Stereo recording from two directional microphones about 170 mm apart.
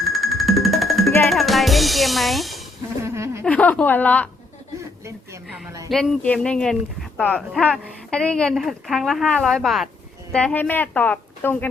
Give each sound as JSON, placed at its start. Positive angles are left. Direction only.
{"t": 0.1, "sound": "music", "side_deg": 0}
{"t": 3.0, "sound": "a sound", "side_deg": -15}
{"t": 3.4, "sound": "a woman's voice", "side_deg": 10}
{"t": 5.9, "sound": "a woman's voice", "side_deg": 5}